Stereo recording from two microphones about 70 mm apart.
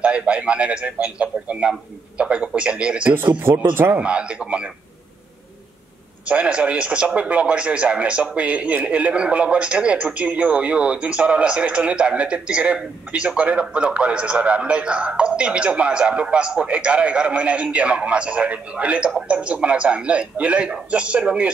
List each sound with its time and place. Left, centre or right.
0.0 s a man's voice: centre
3.3 s speech: right
3.9 s a man's voice: centre
6.2 s a man's voice: centre